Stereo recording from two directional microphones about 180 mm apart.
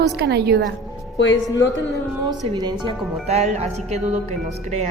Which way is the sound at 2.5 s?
25° right (ahead or behind).